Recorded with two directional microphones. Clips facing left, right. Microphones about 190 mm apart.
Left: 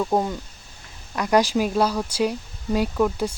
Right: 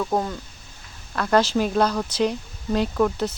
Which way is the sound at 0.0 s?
20° left (ahead or behind).